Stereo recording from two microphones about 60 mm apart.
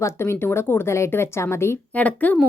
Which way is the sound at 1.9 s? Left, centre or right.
Left.